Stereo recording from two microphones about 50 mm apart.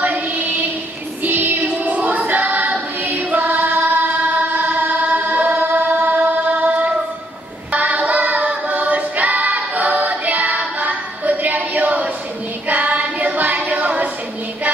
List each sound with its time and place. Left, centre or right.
0.0 s mantra: right
1.2 s music: right
8.5 s a capella: right
12.6 s singing: right